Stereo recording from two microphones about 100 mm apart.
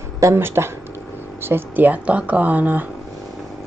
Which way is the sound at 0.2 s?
25° right (ahead or behind).